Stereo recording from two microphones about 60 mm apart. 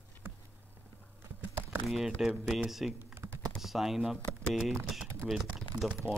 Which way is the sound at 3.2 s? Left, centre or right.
Right.